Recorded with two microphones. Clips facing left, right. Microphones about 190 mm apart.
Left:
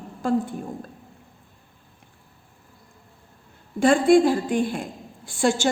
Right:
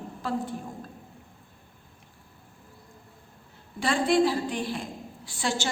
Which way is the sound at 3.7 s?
50° left (ahead or behind).